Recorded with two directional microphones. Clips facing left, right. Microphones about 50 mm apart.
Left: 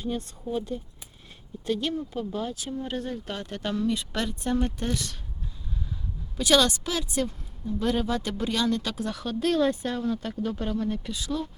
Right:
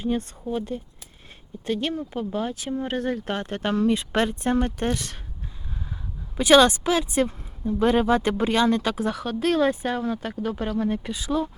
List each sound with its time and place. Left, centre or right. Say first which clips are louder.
0.0 s speech: right 5 dB; right
6.3 s speech: right 6 dB; right
10.6 s speech: right 3 dB; right